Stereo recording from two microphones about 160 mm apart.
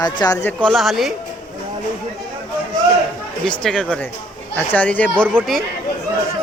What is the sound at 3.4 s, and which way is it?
Speech, 5° left (ahead or behind).